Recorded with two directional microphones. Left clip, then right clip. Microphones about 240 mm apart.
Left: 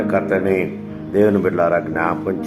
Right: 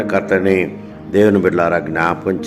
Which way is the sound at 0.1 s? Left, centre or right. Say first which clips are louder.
Right 4 dB; right.